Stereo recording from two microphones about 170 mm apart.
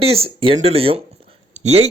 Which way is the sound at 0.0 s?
35° right (ahead or behind).